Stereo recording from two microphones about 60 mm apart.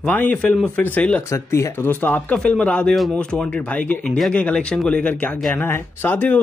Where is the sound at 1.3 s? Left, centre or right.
Left.